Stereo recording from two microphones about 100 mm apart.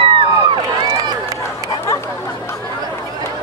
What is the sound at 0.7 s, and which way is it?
Run, 45° right (ahead or behind).